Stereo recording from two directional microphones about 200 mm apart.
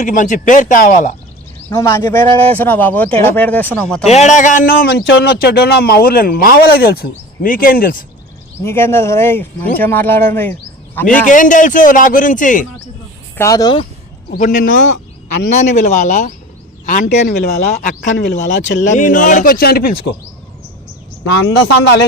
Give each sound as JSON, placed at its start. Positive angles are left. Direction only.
{"t": 0.0, "sound": "a man's voice", "side_deg": 40}
{"t": 1.7, "sound": "a man's voice", "side_deg": 15}
{"t": 4.0, "sound": "a man's voice", "side_deg": 35}
{"t": 4.7, "sound": "speech", "side_deg": 55}
{"t": 8.6, "sound": "a man's voice", "side_deg": 10}
{"t": 11.3, "sound": "a man's voice", "side_deg": 40}
{"t": 13.3, "sound": "a man's voice", "side_deg": 15}
{"t": 14.3, "sound": "a man's voice", "side_deg": 40}
{"t": 18.4, "sound": "speech", "side_deg": 65}
{"t": 18.9, "sound": "speech", "side_deg": 40}
{"t": 21.2, "sound": "speech", "side_deg": 60}